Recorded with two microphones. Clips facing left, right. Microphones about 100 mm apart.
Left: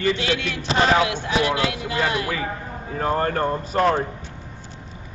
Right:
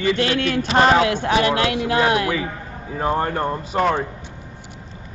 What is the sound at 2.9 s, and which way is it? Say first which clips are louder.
Speech: right 1 dB; 15° right (ahead or behind).